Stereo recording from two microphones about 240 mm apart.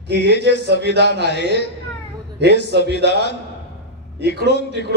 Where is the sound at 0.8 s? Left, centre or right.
Right.